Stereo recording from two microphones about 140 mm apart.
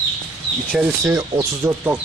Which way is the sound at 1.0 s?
20° right (ahead or behind).